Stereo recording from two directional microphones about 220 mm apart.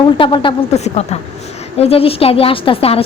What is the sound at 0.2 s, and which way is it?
A woman's voice, 20° left (ahead or behind).